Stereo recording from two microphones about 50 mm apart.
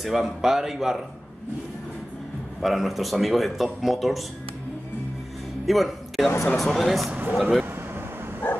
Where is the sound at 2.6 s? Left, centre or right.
Centre.